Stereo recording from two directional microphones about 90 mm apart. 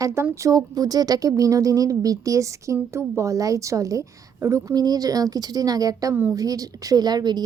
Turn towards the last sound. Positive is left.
turn(degrees=-50)  # may be behind; listen again after turning